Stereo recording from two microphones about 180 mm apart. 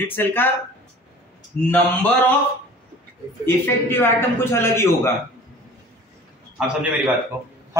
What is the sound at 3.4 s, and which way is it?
A man's voice, 10° left (ahead or behind).